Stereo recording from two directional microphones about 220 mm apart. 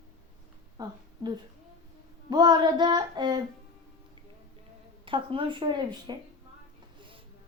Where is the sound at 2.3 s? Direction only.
20° right (ahead or behind).